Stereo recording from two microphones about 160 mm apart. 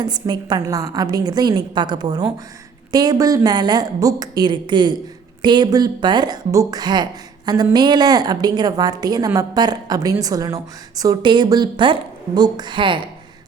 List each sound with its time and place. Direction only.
0.0 s a woman's voice: 25° right (ahead or behind)